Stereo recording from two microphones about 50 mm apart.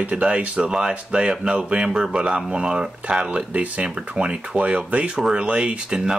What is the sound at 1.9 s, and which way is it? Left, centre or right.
Speech, centre.